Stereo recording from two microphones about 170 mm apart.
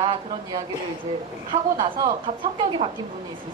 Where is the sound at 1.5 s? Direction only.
30° right (ahead or behind).